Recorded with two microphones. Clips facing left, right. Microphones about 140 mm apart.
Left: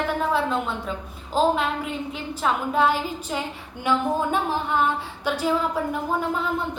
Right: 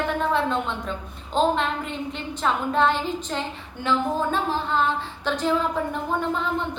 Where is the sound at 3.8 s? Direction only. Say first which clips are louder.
Left 1 dB; 15° left (ahead or behind).